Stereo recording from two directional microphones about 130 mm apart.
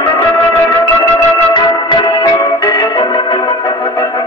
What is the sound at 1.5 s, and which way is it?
Music, 35° left (ahead or behind).